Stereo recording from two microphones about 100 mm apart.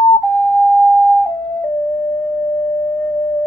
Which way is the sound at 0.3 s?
10° left (ahead or behind).